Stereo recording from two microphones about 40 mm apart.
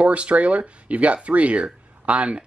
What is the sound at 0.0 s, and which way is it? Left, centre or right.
A man's voice, right.